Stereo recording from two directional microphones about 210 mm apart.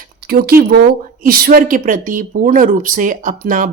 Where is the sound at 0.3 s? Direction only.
45° right (ahead or behind).